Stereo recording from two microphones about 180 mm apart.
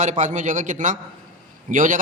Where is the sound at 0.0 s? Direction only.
45° right (ahead or behind).